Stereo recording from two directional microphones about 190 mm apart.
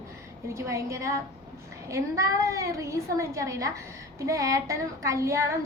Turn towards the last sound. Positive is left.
turn(degrees=-15)  # may be behind; listen again after turning